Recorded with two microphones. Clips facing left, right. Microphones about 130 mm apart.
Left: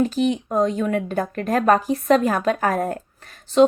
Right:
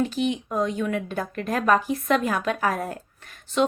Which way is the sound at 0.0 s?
40° left (ahead or behind).